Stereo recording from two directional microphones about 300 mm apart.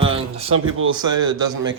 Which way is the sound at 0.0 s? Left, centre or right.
Centre.